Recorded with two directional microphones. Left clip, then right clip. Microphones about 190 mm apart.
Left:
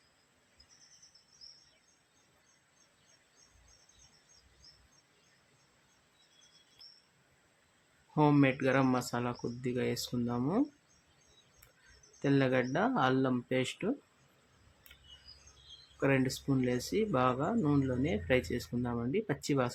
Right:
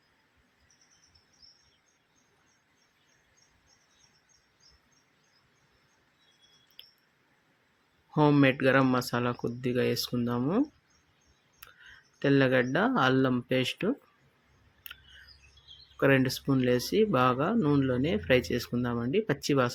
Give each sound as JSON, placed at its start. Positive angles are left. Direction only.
{"t": 8.1, "sound": "speech", "side_deg": -20}
{"t": 12.2, "sound": "speech", "side_deg": -20}
{"t": 16.0, "sound": "speech", "side_deg": -25}